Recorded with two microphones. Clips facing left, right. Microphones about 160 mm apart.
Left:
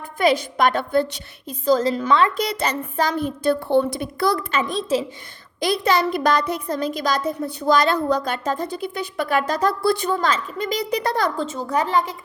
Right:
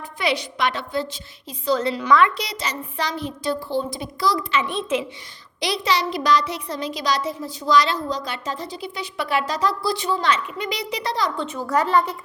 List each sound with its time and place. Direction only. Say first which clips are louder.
0.2 s a child's voice: left 5 dB; 50° left (ahead or behind)
1.6 s a woman's voice: left 4 dB; 40° left (ahead or behind)
2.0 s a woman's voice: right 3 dB; 30° left (ahead or behind)
2.3 s a woman's voice: left 6 dB; 55° left (ahead or behind)
4.6 s a woman's voice: left 2 dB; 35° left (ahead or behind)
5.5 s a child's voice: left 3 dB; 50° left (ahead or behind)
11.7 s a woman's voice: right 2 dB; 15° left (ahead or behind)